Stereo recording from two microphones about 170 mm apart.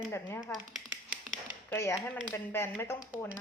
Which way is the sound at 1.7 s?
15° left (ahead or behind).